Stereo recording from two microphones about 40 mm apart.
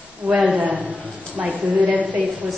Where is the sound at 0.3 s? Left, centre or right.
Right.